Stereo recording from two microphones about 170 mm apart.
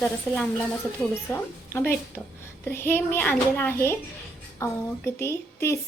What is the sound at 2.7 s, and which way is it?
A child's voice, 15° left (ahead or behind).